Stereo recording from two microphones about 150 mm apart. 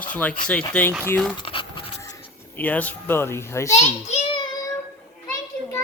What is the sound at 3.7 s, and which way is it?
Speech, 50° left (ahead or behind).